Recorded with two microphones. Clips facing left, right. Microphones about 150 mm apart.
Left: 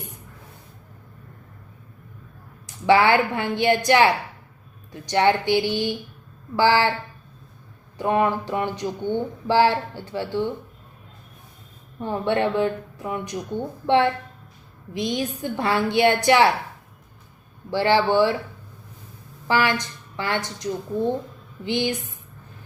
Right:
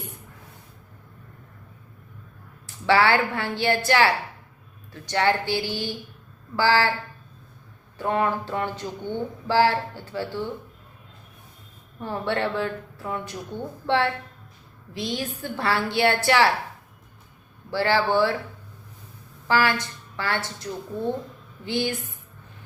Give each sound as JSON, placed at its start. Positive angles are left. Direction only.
{"t": 2.8, "sound": "speech", "side_deg": 15}
{"t": 7.9, "sound": "speech", "side_deg": 15}
{"t": 11.9, "sound": "speech", "side_deg": 20}
{"t": 17.7, "sound": "speech", "side_deg": 20}
{"t": 19.5, "sound": "speech", "side_deg": 20}